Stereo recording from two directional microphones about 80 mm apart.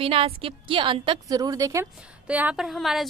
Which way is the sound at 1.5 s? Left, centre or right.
Right.